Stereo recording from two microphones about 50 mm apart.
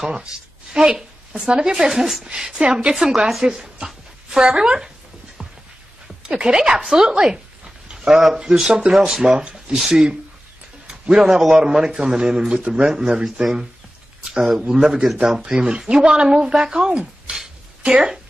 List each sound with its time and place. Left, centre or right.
0.0 s a man's voice: centre
1.9 s speech: centre
2.2 s a man's voice: centre
6.4 s a man's voice: centre
9.4 s a sound: centre
9.8 s a man's voice: centre